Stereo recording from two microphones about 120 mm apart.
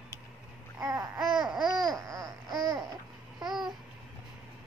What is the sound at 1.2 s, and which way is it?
Babbling, 5° right (ahead or behind).